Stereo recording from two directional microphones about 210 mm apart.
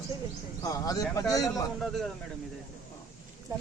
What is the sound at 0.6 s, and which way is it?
Speech, 15° left (ahead or behind).